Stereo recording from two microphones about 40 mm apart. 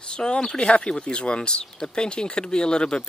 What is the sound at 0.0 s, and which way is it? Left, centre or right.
Speech, left.